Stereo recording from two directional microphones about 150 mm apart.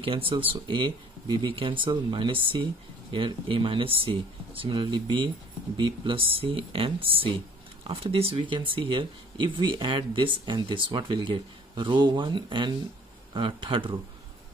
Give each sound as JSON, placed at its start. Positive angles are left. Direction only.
{"t": 0.0, "sound": "speech", "side_deg": -35}